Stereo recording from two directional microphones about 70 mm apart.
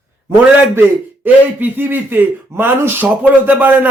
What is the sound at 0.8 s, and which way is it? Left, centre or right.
A man's voice, right.